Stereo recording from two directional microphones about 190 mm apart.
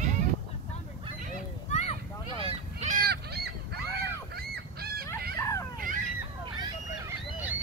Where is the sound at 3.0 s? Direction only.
55° right (ahead or behind).